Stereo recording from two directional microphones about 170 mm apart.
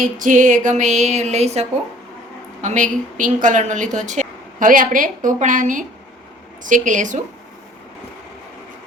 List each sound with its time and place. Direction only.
0.0 s a woman's voice: 50° right (ahead or behind)